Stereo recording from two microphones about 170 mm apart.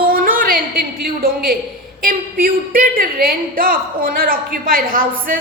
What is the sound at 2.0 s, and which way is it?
A woman's voice, 55° right (ahead or behind).